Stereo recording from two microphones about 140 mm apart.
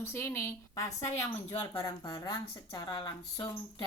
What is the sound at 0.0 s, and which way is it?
A woman's voice, 15° left (ahead or behind).